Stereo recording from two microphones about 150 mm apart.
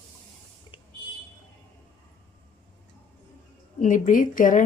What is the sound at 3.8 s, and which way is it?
Speech, 55° left (ahead or behind).